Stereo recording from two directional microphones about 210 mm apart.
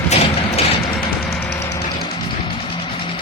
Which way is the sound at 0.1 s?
30° left (ahead or behind).